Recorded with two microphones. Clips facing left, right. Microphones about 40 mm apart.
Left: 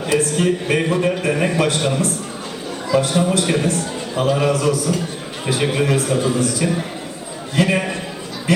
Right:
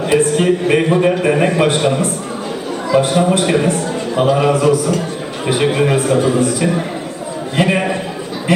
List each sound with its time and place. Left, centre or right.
0.1 s a man's voice: right
8.5 s speech: right